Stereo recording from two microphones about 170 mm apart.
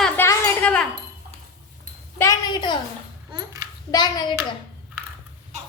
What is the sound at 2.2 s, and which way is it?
Speech, 20° left (ahead or behind).